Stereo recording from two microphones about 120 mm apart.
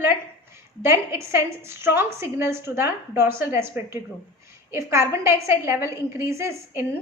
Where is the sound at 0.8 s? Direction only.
20° right (ahead or behind).